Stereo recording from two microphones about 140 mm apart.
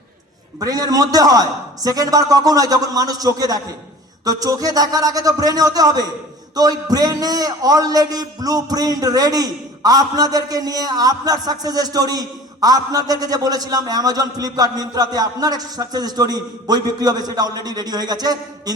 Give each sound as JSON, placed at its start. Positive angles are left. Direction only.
{"t": 0.6, "sound": "a man's voice", "side_deg": -25}